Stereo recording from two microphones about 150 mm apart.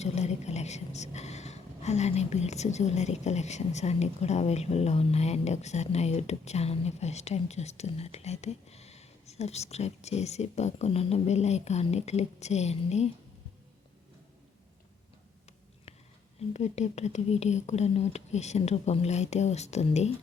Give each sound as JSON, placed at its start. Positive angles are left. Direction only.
{"t": 0.0, "sound": "a woman's voice", "side_deg": 50}
{"t": 15.9, "sound": "whispering", "side_deg": 45}
{"t": 16.5, "sound": "a woman's voice", "side_deg": 50}